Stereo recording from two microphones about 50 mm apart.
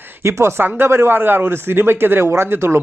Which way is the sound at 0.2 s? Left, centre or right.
Right.